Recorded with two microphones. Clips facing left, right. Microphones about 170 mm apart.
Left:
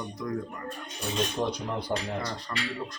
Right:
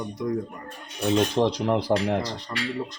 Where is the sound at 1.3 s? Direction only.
90° right; by 2.4 s 70° right (ahead or behind).